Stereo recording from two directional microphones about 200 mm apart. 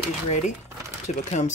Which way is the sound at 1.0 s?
35° left (ahead or behind).